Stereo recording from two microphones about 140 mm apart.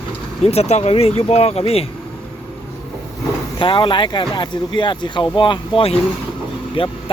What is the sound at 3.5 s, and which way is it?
Speech, 35° left (ahead or behind).